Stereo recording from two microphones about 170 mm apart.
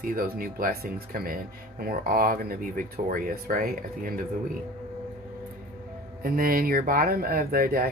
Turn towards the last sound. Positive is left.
turn(degrees=-60)  # may be behind; listen again after turning